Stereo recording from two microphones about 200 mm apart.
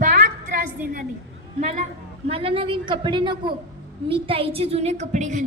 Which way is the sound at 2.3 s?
30° right (ahead or behind).